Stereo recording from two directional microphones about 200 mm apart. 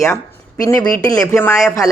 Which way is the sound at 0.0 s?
15° left (ahead or behind).